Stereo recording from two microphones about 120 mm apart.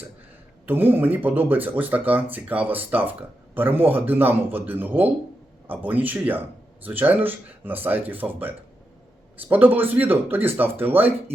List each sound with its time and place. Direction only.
0.7 s speech: 15° right (ahead or behind)